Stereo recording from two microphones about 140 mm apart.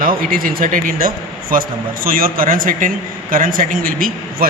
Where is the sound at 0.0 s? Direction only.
90° right.